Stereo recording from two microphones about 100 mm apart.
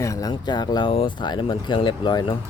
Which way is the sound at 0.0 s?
35° left (ahead or behind).